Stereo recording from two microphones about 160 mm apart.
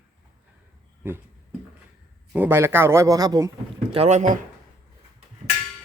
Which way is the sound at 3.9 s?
40° right (ahead or behind).